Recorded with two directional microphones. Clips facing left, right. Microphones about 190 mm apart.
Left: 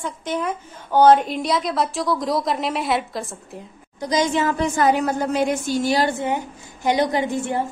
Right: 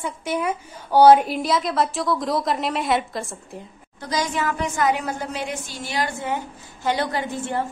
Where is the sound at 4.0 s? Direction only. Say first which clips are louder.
Left 5 dB; 20° left (ahead or behind).